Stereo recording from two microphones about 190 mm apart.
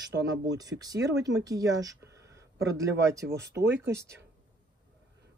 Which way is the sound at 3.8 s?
15° right (ahead or behind).